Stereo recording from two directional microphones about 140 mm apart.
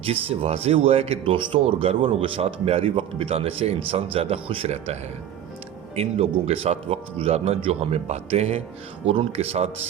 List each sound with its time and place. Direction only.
0.0 s speech: 45° right (ahead or behind)
6.0 s speech: 50° right (ahead or behind)